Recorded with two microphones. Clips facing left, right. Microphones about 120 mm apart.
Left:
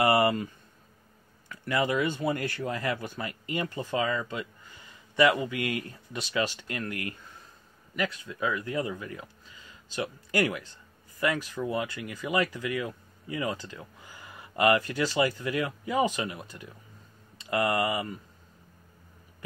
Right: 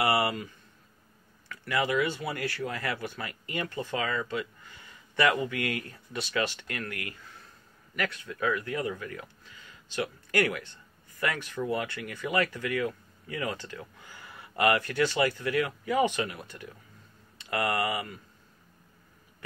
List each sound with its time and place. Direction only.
1.5 s speech: 20° left (ahead or behind)